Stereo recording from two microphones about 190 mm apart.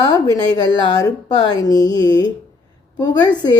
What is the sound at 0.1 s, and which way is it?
A woman's voice, 20° left (ahead or behind).